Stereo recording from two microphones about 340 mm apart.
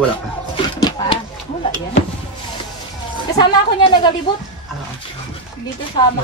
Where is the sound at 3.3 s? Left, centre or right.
Centre.